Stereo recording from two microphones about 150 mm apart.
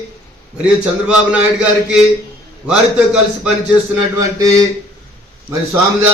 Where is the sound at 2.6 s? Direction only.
5° right (ahead or behind).